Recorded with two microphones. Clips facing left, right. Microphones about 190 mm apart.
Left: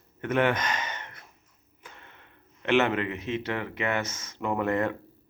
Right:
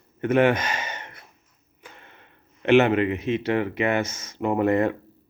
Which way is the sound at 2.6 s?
15° right (ahead or behind).